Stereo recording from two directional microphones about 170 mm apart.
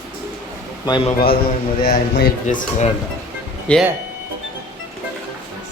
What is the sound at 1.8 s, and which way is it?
Speech, 65° left (ahead or behind).